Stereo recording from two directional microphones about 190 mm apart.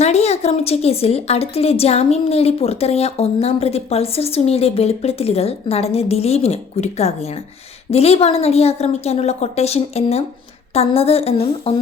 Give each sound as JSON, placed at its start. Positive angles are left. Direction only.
{"t": 0.0, "sound": "a woman's voice", "side_deg": 35}